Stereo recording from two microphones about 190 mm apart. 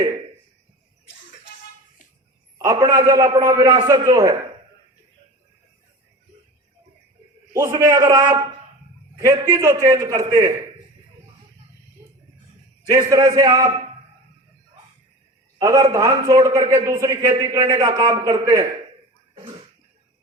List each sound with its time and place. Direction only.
2.6 s a man's voice: 20° right (ahead or behind)
7.6 s a man's voice: 20° right (ahead or behind)
12.9 s a man's voice: 20° right (ahead or behind)
15.5 s a man's voice: 20° right (ahead or behind)